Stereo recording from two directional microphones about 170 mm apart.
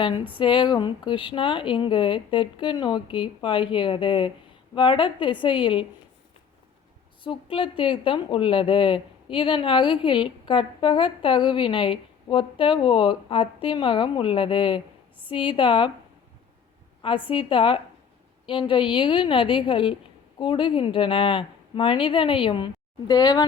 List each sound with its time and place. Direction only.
0.3 s speech: 30° left (ahead or behind)
7.3 s speech: 30° left (ahead or behind)
17.0 s a woman's voice: 30° left (ahead or behind)